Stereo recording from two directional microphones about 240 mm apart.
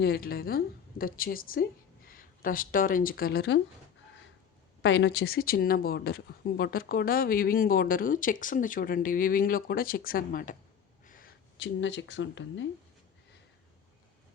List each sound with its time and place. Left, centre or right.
0.0 s speech: left
4.8 s speech: left
11.0 s a sound: left
11.6 s speech: left